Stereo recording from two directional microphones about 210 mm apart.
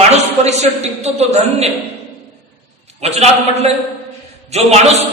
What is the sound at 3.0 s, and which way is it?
A man's voice, 30° right (ahead or behind).